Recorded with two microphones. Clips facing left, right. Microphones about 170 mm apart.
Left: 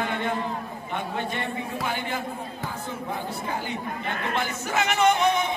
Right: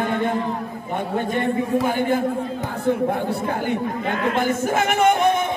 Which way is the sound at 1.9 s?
50° right (ahead or behind).